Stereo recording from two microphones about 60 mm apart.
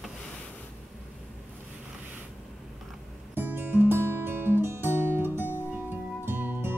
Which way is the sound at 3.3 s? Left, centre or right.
Right.